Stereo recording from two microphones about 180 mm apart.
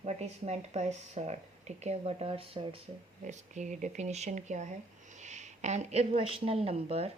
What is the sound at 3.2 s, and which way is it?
Speech, 40° right (ahead or behind).